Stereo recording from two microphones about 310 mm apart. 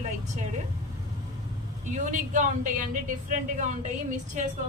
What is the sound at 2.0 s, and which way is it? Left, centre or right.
A woman's voice, right.